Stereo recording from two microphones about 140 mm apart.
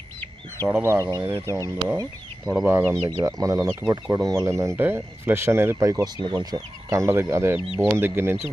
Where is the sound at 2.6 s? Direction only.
20° right (ahead or behind).